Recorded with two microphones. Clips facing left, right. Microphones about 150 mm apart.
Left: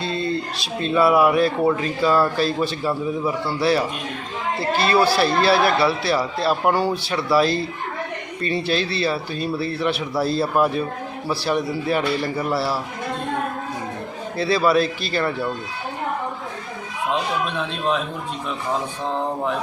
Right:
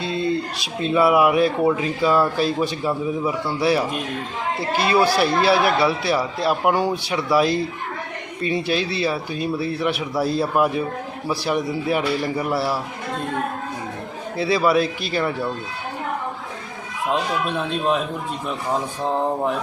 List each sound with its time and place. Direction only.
0.0 s a sound: 15° right (ahead or behind)
0.8 s speech: 15° right (ahead or behind)
14.3 s speech: 15° right (ahead or behind)
17.4 s speech: 5° right (ahead or behind)
19.0 s speech: 10° right (ahead or behind)